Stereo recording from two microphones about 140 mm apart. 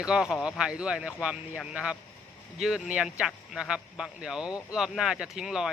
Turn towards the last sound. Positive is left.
turn(degrees=-5)  # may be behind; listen again after turning